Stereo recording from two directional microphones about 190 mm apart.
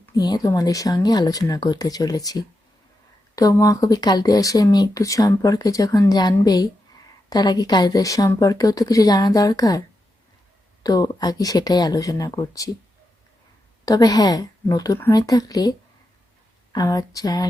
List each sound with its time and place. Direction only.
0.0 s speech: 20° left (ahead or behind)
10.8 s speech: 20° left (ahead or behind)
13.8 s speech: 20° left (ahead or behind)
16.7 s speech: 20° left (ahead or behind)